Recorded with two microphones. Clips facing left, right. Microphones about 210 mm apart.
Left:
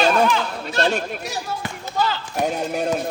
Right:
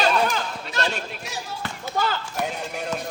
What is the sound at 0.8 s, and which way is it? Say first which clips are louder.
Speech: left 7 dB; 45° left (ahead or behind).